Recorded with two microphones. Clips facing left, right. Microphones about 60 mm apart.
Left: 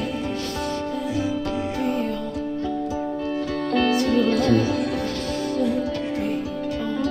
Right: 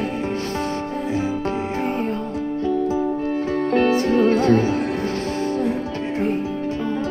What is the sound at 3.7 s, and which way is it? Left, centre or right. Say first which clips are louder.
Music: right 2 dB; right.